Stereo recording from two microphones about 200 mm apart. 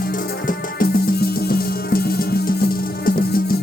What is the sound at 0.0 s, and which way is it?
Music, 45° left (ahead or behind).